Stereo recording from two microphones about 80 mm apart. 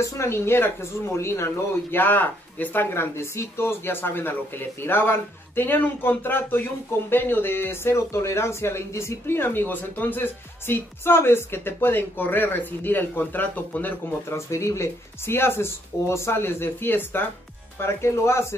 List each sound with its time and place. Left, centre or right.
0.0 s speech: left
14.3 s speech: left